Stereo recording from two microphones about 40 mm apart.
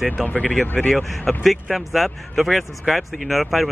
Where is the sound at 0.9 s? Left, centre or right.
Centre.